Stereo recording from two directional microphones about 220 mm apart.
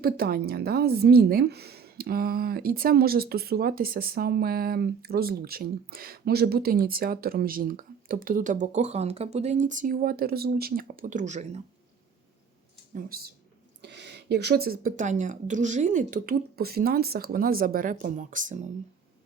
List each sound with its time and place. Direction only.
0.0 s a woman's voice: 45° right (ahead or behind)
12.9 s speech: 40° right (ahead or behind)
13.8 s speech: 50° right (ahead or behind); by 18.7 s 35° right (ahead or behind)